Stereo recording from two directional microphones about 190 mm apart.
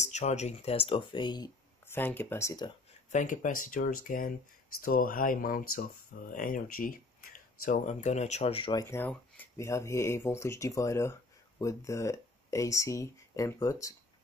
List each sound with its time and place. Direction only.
0.0 s speech: 40° left (ahead or behind); by 2.7 s 20° left (ahead or behind)
3.1 s speech: 40° left (ahead or behind)
8.8 s speech: 10° left (ahead or behind)